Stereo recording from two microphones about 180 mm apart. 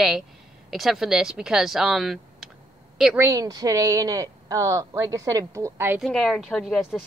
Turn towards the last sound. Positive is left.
turn(degrees=5)  # may be behind; listen again after turning